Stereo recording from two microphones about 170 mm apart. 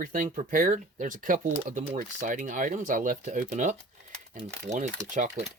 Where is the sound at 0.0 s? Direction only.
50° right (ahead or behind).